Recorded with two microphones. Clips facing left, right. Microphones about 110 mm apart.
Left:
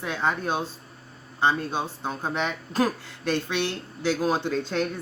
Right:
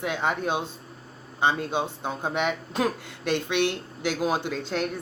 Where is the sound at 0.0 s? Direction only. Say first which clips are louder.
Even; 15° right (ahead or behind).